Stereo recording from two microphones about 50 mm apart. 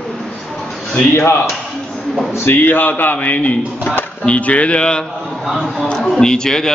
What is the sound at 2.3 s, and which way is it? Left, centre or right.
Speech, left.